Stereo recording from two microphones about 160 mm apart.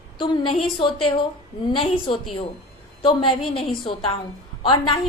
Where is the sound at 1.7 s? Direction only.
35° left (ahead or behind).